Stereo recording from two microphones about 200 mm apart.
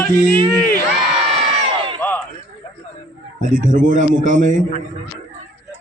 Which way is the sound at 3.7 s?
40° right (ahead or behind).